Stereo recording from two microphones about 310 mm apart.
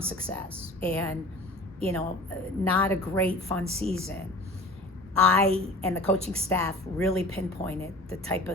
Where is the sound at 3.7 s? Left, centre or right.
Centre.